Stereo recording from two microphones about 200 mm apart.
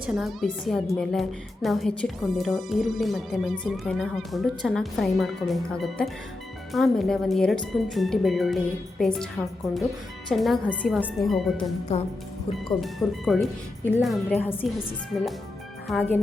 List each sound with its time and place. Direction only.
0.0 s a woman's voice: centre (ahead or behind)
12.5 s a woman's voice: centre (ahead or behind)
14.5 s a woman's voice: 25° left (ahead or behind)
15.9 s a woman's voice: 5° left (ahead or behind)